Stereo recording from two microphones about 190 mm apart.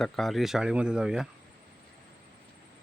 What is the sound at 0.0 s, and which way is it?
Speech, centre (ahead or behind).